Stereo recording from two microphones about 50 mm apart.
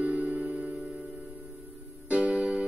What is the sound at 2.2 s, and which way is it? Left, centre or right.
Music, right.